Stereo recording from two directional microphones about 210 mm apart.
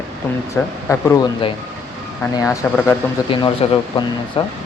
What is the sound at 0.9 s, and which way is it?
Speech, 15° left (ahead or behind).